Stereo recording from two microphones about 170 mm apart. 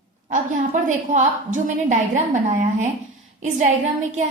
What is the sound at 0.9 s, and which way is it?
A woman's voice, 45° right (ahead or behind).